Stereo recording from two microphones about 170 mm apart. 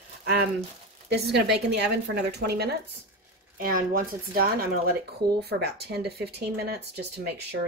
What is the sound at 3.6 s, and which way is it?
Speech, 60° right (ahead or behind).